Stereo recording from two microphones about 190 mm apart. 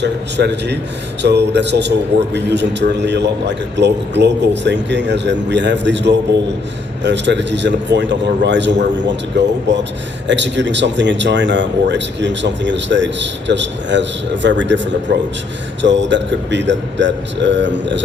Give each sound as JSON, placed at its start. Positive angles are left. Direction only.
{"t": 0.0, "sound": "a man's voice", "side_deg": -65}